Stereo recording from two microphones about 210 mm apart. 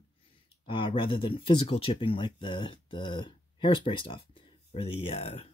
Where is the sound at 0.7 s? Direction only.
25° left (ahead or behind).